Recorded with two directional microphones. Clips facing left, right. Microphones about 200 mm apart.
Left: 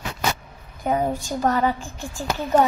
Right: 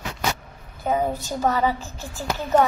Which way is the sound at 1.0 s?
10° left (ahead or behind).